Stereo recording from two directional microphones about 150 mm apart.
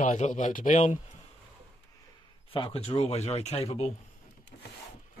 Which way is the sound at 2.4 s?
35° left (ahead or behind).